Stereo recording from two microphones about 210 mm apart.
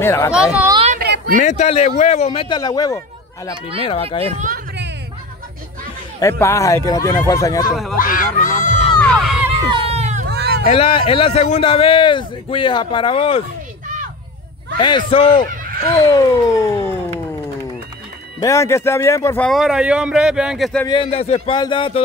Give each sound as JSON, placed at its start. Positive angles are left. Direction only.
{"t": 0.0, "sound": "speech", "side_deg": 10}
{"t": 0.9, "sound": "a sound", "side_deg": -50}
{"t": 1.4, "sound": "a man's voice", "side_deg": 35}
{"t": 4.2, "sound": "speech", "side_deg": -30}
{"t": 4.5, "sound": "a sound", "side_deg": -55}
{"t": 6.1, "sound": "speech", "side_deg": 15}
{"t": 7.9, "sound": "speech", "side_deg": 40}
{"t": 9.0, "sound": "crowd", "side_deg": 0}
{"t": 9.5, "sound": "crowd", "side_deg": -25}
{"t": 10.2, "sound": "hubbub", "side_deg": -50}
{"t": 10.6, "sound": "speech", "side_deg": 30}
{"t": 14.8, "sound": "speech", "side_deg": 20}
{"t": 18.4, "sound": "a man's voice", "side_deg": 15}
{"t": 20.8, "sound": "speech", "side_deg": 25}